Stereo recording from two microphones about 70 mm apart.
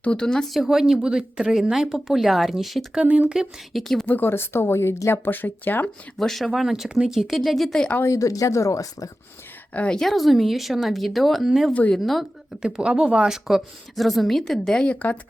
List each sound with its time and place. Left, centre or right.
0.0 s speech: centre
0.5 s a woman's voice: centre
2.9 s speech: centre
3.7 s a woman's voice: centre
4.0 s speech: left
6.1 s a woman's voice: centre
8.0 s speech: left
9.7 s speech: centre
10.0 s a woman's voice: centre
11.7 s a woman's voice: left
11.9 s a woman's voice: centre
12.6 s a woman's voice: centre
14.8 s a woman's voice: centre